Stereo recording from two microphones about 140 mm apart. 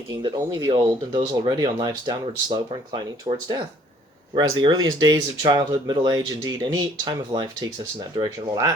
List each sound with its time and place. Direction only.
0.1 s speech: 25° right (ahead or behind)